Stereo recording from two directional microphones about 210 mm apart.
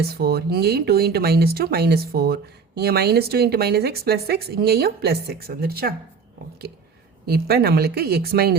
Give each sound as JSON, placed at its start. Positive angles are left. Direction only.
{"t": 0.0, "sound": "speech", "side_deg": -50}
{"t": 7.3, "sound": "speech", "side_deg": -45}